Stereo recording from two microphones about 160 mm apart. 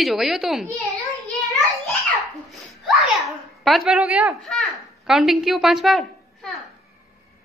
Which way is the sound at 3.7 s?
5° right (ahead or behind).